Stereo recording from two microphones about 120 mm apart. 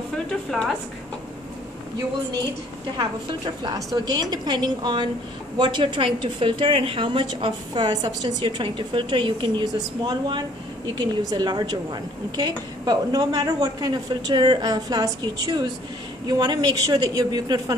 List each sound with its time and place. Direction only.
0.5 s a woman's voice: centre (ahead or behind)
3.6 s a woman's voice: 35° right (ahead or behind)